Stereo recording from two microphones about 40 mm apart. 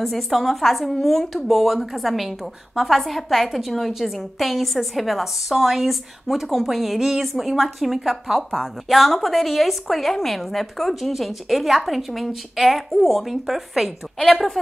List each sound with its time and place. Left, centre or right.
0.0 s a woman's voice: centre
14.1 s a woman's voice: centre